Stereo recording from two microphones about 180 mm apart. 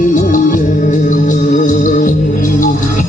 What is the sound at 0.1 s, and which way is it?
Music, 45° left (ahead or behind).